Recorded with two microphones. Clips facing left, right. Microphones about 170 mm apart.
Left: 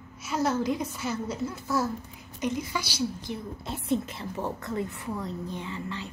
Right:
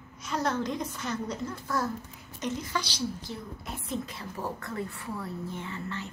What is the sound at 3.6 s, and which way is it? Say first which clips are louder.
A woman's voice: left 7 dB; 30° left (ahead or behind).